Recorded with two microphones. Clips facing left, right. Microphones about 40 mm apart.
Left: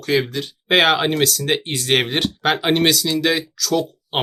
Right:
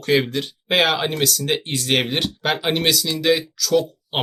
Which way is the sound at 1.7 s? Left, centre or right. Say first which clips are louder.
Left 2 dB; centre.